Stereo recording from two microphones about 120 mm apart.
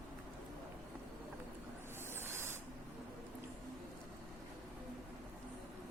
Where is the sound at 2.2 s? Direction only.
20° right (ahead or behind).